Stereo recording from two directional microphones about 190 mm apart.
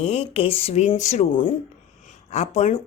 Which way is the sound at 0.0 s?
35° left (ahead or behind).